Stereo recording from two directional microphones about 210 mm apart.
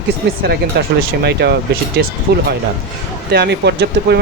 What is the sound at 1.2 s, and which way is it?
Speech, 50° right (ahead or behind).